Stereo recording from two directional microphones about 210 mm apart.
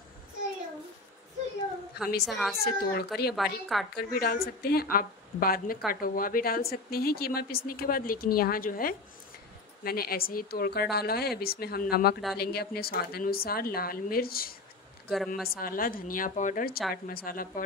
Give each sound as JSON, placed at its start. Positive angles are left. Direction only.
{"t": 2.0, "sound": "a woman's voice", "side_deg": 50}
{"t": 3.3, "sound": "a woman's voice", "side_deg": 0}
{"t": 3.9, "sound": "a woman's voice", "side_deg": 45}
{"t": 15.0, "sound": "a woman's voice", "side_deg": 0}
{"t": 15.4, "sound": "a woman's voice", "side_deg": 45}